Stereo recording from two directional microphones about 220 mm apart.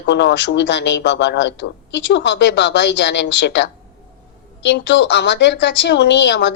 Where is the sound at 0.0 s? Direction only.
55° left (ahead or behind).